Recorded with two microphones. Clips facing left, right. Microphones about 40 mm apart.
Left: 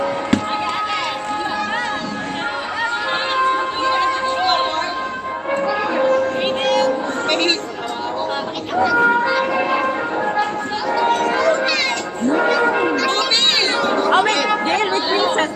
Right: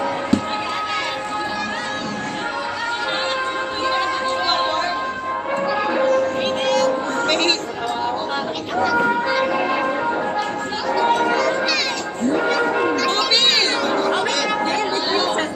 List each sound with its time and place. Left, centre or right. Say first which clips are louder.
3.3 s a sound: left 5 dB; centre
5.5 s music: left 2 dB; centre
6.0 s music: left 1 dB; centre
7.2 s chatter: left 1 dB; centre
8.7 s music: left 3 dB; centre
9.6 s change ringing: left 2 dB; centre
11.3 s a sound: left 3 dB; centre
12.4 s music: left 3 dB; centre
13.7 s cat: left 2 dB; centre
14.6 s chatter: left 2 dB; left